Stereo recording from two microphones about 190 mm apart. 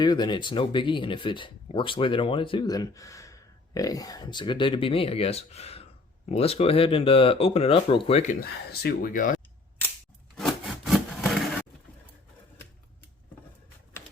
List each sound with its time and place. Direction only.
0.0 s speech: 25° left (ahead or behind)
8.7 s speech: 55° left (ahead or behind)
10.3 s wood: centre (ahead or behind)